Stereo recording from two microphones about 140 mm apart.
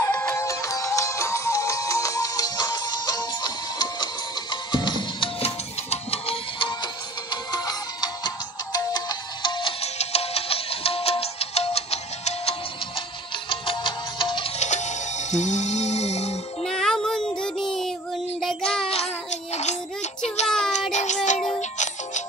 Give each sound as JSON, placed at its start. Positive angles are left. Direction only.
{"t": 0.0, "sound": "music", "side_deg": 20}
{"t": 13.5, "sound": "music", "side_deg": 35}
{"t": 14.6, "sound": "music", "side_deg": 55}
{"t": 16.6, "sound": "child singing", "side_deg": 5}
{"t": 19.5, "sound": "child singing", "side_deg": 55}
{"t": 20.4, "sound": "child singing", "side_deg": 5}
{"t": 20.9, "sound": "child singing", "side_deg": 55}
{"t": 21.5, "sound": "music", "side_deg": 55}